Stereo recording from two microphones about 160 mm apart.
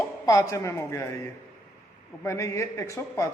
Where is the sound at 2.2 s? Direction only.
20° left (ahead or behind).